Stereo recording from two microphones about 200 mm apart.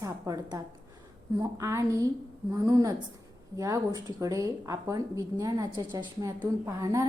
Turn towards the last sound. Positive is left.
turn(degrees=-15)  # may be behind; listen again after turning